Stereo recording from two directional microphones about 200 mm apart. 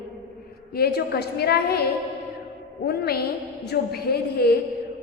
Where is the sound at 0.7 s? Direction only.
50° left (ahead or behind).